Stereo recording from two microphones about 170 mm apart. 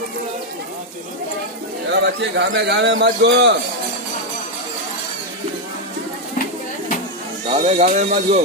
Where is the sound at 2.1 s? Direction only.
90° right.